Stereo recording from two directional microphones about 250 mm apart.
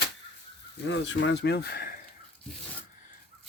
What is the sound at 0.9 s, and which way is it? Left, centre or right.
Speech, left.